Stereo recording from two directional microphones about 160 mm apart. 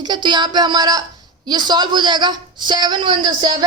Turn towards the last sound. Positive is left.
turn(degrees=-25)  # may be behind; listen again after turning